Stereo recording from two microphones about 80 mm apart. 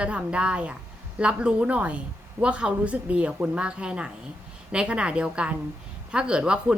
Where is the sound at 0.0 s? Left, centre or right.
Centre.